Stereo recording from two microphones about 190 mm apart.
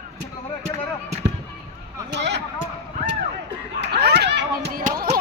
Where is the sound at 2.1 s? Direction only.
65° right (ahead or behind).